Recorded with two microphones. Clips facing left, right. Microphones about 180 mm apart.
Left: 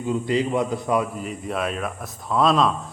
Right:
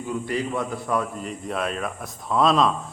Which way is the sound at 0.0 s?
20° left (ahead or behind).